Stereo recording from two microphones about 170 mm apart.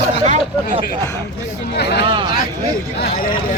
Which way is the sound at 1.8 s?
75° left (ahead or behind).